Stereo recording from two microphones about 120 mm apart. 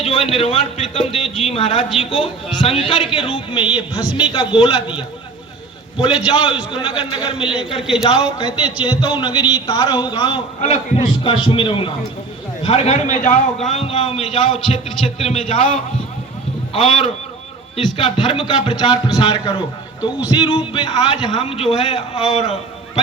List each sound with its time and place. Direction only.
0.0 s a man's voice: 55° left (ahead or behind)
6.2 s a man's voice: 40° left (ahead or behind)
7.8 s speech: 5° right (ahead or behind)
8.6 s a man's voice: 35° left (ahead or behind)
10.6 s a man's voice: 65° left (ahead or behind)
11.2 s a man's voice: 45° left (ahead or behind)
12.6 s a man's voice: 60° left (ahead or behind); by 18.8 s 40° left (ahead or behind)
18.9 s speech: 5° right (ahead or behind)
19.2 s a man's voice: 45° left (ahead or behind)